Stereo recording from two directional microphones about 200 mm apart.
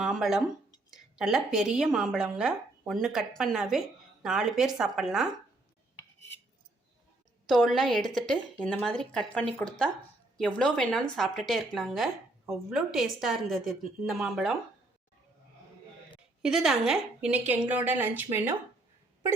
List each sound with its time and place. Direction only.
0.0 s a woman's voice: centre (ahead or behind)
7.4 s a woman's voice: centre (ahead or behind)
16.4 s a woman's voice: centre (ahead or behind)